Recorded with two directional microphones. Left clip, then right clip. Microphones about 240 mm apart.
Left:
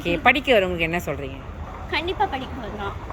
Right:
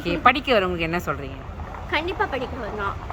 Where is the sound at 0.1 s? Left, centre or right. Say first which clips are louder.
Left 1 dB; centre.